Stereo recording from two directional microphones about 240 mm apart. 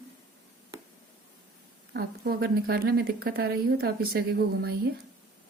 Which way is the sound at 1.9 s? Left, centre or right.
Right.